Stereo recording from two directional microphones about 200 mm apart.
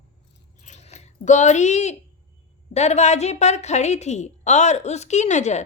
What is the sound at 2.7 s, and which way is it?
A woman's voice, 35° left (ahead or behind).